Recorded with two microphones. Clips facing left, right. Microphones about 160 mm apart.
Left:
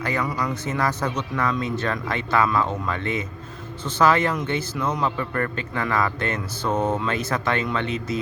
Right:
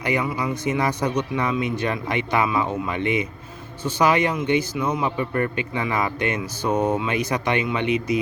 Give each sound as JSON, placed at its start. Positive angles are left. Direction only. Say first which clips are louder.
{"t": 0.0, "sound": "a man's voice", "louder": "right 2 dB", "side_deg": -15}